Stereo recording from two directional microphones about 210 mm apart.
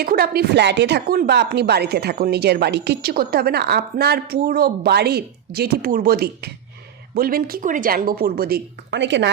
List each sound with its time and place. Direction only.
0.0 s speech: 45° right (ahead or behind)